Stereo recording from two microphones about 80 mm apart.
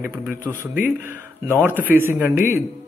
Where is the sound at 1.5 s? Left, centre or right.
Right.